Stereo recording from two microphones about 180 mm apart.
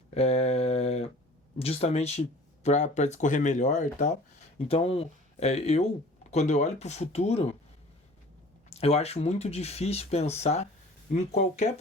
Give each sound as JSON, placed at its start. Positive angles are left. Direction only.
{"t": 0.1, "sound": "a sound", "side_deg": 35}
{"t": 1.5, "sound": "speech", "side_deg": 35}
{"t": 8.7, "sound": "speech", "side_deg": 35}